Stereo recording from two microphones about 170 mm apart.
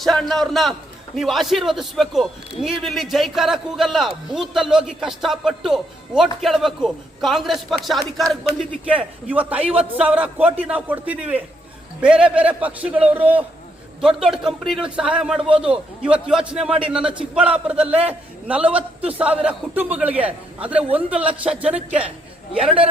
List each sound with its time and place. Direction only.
0.0 s a man's voice: centre (ahead or behind)